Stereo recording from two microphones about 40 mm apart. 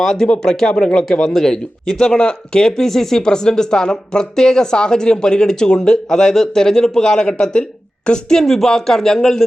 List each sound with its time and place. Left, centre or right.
0.0 s speech: centre
1.3 s speech: centre
1.9 s speech: left
8.4 s speech: centre